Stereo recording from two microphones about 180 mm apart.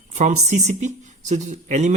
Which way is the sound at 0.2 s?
40° right (ahead or behind).